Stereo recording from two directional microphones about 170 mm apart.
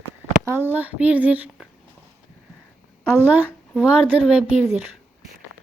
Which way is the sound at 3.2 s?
10° right (ahead or behind).